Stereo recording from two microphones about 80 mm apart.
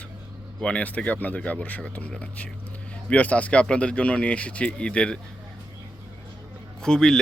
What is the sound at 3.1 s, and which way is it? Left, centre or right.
Speech, centre.